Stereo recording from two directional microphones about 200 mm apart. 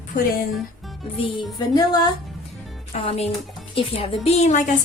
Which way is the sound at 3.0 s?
30° left (ahead or behind).